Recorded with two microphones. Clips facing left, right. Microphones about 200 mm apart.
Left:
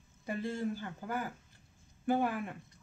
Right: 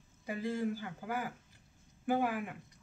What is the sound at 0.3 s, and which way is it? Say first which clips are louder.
Speech: even; 15° right (ahead or behind).